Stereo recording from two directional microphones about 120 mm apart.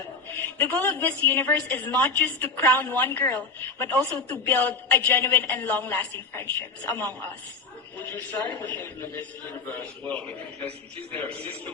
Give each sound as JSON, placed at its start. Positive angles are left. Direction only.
{"t": 0.6, "sound": "a woman's voice", "side_deg": 15}